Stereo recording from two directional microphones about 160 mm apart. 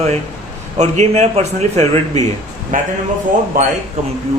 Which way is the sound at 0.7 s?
45° right (ahead or behind).